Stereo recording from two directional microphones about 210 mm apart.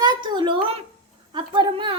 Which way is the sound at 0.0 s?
20° right (ahead or behind).